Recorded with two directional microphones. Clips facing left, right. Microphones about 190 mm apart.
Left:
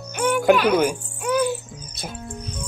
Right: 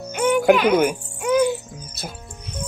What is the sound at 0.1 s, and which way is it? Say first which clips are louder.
Music: right 2 dB; 15° right (ahead or behind).